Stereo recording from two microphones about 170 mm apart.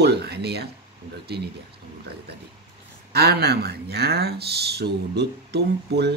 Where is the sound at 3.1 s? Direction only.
70° right (ahead or behind).